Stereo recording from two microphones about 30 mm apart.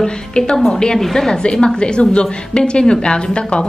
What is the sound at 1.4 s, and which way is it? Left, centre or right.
A woman's voice, left.